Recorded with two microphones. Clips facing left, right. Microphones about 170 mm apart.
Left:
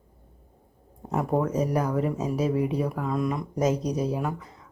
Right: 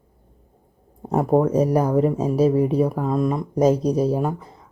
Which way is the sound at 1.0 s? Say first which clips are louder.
Right 7 dB; 35° right (ahead or behind).